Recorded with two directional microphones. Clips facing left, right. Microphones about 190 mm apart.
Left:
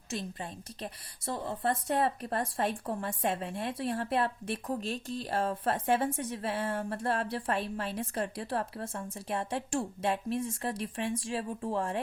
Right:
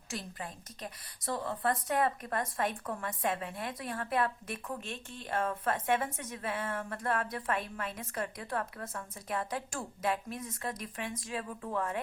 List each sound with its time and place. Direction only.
0.1 s a woman's voice: 25° left (ahead or behind)